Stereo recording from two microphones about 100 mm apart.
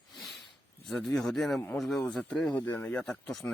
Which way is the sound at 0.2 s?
Centre (ahead or behind).